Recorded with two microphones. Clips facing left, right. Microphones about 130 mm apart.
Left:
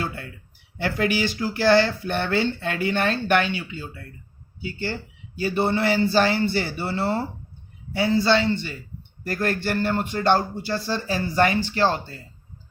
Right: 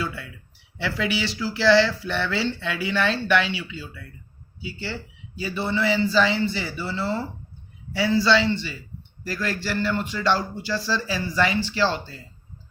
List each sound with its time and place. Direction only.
0.0 s speech: 45° left (ahead or behind)
5.4 s a man's voice: 55° left (ahead or behind)